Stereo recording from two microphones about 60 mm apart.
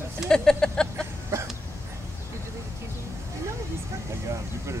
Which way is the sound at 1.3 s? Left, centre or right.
Right.